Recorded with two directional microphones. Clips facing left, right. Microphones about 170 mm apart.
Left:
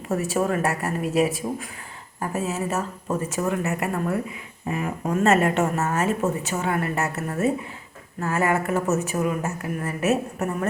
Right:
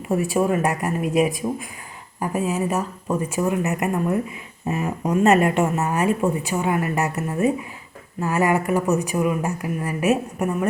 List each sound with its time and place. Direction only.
0.1 s a woman's voice: 15° right (ahead or behind)